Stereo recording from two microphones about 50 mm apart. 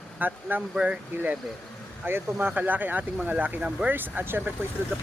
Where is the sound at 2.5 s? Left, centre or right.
Right.